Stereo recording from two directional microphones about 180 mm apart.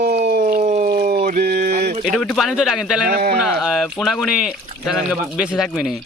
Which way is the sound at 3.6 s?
Centre (ahead or behind).